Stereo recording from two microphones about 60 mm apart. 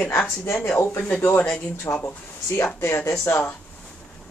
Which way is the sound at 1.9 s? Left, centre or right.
Left.